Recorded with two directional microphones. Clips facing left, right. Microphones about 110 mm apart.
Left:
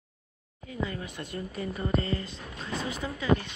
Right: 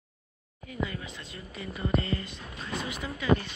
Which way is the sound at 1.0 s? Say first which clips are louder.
Left 6 dB; 55° left (ahead or behind).